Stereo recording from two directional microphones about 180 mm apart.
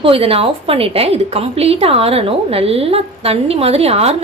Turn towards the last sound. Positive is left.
turn(degrees=-35)  # may be behind; listen again after turning